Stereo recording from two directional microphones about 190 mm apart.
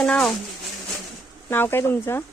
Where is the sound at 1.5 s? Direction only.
10° left (ahead or behind).